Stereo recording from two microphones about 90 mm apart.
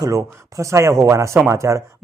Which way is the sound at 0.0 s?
40° right (ahead or behind).